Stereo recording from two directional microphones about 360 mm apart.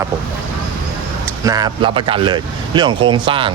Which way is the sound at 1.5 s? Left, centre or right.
Centre.